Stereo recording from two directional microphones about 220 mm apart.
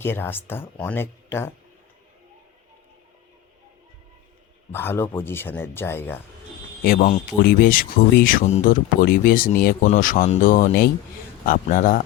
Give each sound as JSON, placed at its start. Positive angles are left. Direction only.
{"t": 0.0, "sound": "speech", "side_deg": 10}
{"t": 4.7, "sound": "speech", "side_deg": 10}
{"t": 6.8, "sound": "speech", "side_deg": 40}